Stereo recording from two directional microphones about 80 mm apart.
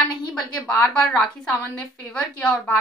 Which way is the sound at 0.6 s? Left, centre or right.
Centre.